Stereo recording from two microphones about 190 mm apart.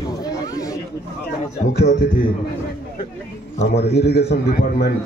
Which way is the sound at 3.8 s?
60° left (ahead or behind).